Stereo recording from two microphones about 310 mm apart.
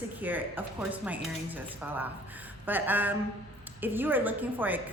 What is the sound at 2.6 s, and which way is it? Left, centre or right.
A woman's voice, centre.